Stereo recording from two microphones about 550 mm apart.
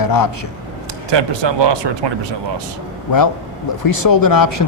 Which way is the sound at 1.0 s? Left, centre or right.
Right.